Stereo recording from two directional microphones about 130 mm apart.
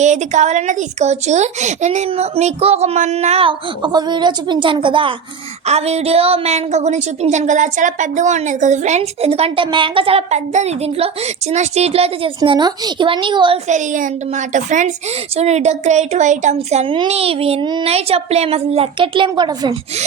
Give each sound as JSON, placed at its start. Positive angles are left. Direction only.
{"t": 0.0, "sound": "a woman's voice", "side_deg": -65}
{"t": 3.8, "sound": "a woman's voice", "side_deg": -35}
{"t": 5.6, "sound": "a woman's voice", "side_deg": -55}
{"t": 12.5, "sound": "a woman's voice", "side_deg": -35}
{"t": 13.7, "sound": "a woman's voice", "side_deg": -75}
{"t": 15.4, "sound": "a woman's voice", "side_deg": -55}
{"t": 16.9, "sound": "a woman's voice", "side_deg": -45}